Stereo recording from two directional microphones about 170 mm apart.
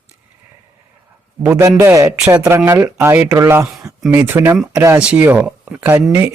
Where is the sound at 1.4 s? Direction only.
15° right (ahead or behind).